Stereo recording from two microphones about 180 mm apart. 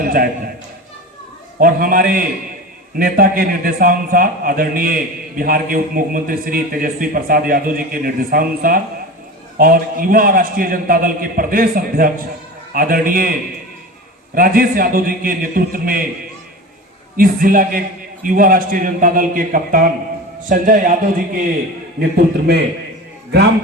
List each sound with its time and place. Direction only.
0.0 s a man's voice: 55° right (ahead or behind)
1.5 s a man's voice: 50° right (ahead or behind)
14.3 s a man's voice: 55° right (ahead or behind)
17.2 s a man's voice: 50° right (ahead or behind)
22.5 s a man's voice: 60° right (ahead or behind)